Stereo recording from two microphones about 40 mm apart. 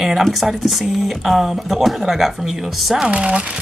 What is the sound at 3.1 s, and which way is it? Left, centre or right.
Speech, right.